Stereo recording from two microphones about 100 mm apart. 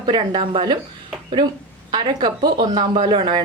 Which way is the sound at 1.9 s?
50° right (ahead or behind).